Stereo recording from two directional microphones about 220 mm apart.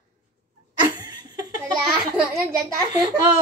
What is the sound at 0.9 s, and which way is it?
Laughter, 15° right (ahead or behind).